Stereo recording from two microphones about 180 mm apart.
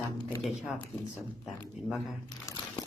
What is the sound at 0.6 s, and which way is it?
Speech, centre (ahead or behind).